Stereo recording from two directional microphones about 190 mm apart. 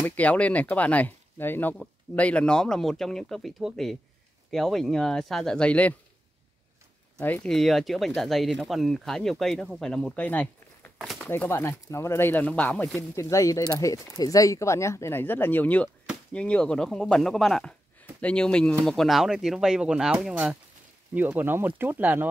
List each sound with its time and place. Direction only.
0.0 s speech: 10° left (ahead or behind)
7.2 s speech: 10° left (ahead or behind); by 22.3 s 10° right (ahead or behind)